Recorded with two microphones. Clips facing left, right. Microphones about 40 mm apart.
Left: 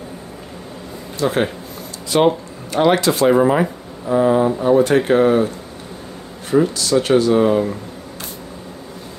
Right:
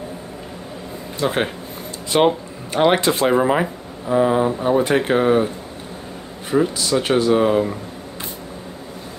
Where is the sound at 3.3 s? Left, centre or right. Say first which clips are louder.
Left 4 dB; centre.